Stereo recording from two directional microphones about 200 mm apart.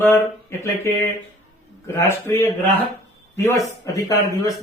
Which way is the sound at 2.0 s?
15° left (ahead or behind).